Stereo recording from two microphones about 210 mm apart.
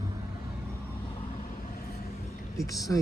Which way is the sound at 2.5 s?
15° left (ahead or behind).